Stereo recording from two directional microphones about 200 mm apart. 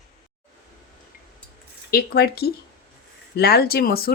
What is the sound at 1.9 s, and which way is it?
Speech, 50° left (ahead or behind).